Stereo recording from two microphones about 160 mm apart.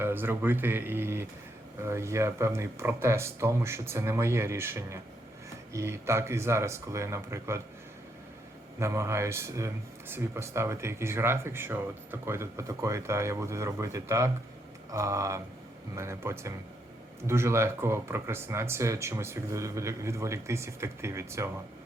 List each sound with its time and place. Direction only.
0.0 s speech: 15° right (ahead or behind)
8.8 s speech: 15° right (ahead or behind)